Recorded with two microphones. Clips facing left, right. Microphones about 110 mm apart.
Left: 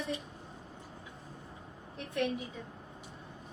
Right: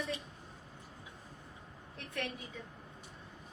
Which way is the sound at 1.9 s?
20° left (ahead or behind).